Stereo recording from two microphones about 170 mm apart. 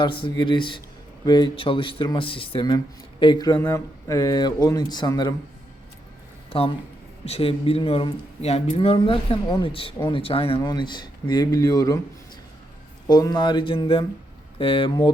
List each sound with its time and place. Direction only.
0.0 s speech: 30° left (ahead or behind)
6.5 s speech: 30° left (ahead or behind)
13.1 s speech: 25° left (ahead or behind)